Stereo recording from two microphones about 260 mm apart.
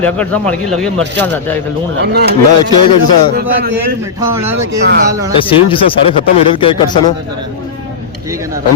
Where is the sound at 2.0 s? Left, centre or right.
Right.